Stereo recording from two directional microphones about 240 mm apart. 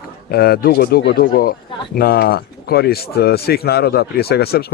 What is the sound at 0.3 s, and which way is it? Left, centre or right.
Speech, left.